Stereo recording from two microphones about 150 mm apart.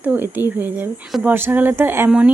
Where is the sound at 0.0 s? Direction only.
10° right (ahead or behind).